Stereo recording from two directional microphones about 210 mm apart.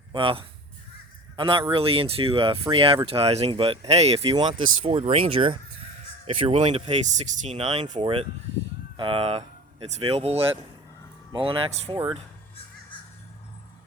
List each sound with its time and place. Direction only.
0.1 s speech: 25° right (ahead or behind)